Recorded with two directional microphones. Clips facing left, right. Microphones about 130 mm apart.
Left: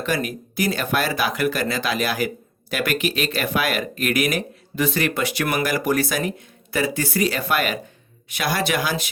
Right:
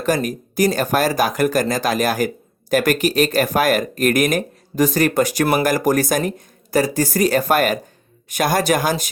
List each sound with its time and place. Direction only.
0.0 s speech: 40° right (ahead or behind)